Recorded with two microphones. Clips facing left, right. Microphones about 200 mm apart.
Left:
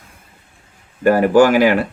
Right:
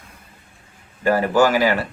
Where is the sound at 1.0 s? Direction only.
55° left (ahead or behind).